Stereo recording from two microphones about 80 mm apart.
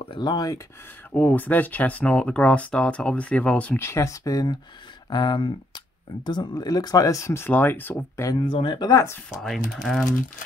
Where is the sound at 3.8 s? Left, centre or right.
Left.